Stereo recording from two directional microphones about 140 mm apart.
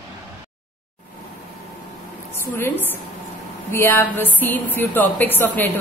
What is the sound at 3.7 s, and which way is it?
Speech, 15° left (ahead or behind).